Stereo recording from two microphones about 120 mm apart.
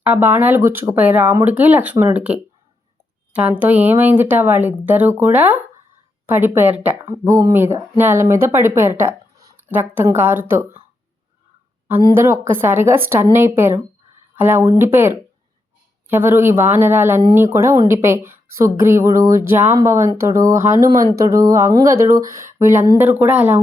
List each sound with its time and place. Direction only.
0.0 s speech: 15° right (ahead or behind)
7.0 s speech: 25° right (ahead or behind)
9.0 s a sound: 25° right (ahead or behind)
9.6 s speech: 15° right (ahead or behind)
12.1 s speech: 20° right (ahead or behind)